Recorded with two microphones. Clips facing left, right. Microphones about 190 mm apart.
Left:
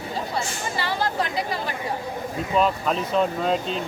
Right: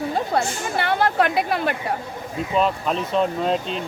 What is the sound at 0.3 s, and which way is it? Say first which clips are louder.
Speech: right 5 dB; 60° right (ahead or behind).